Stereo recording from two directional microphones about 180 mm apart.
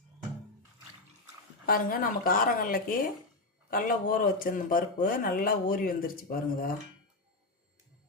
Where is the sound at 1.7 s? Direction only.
50° left (ahead or behind).